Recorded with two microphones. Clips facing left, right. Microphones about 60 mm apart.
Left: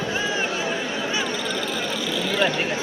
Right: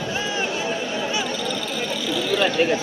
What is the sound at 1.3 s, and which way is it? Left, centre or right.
Frog, left.